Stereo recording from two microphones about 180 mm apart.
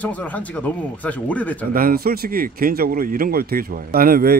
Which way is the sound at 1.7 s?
55° right (ahead or behind).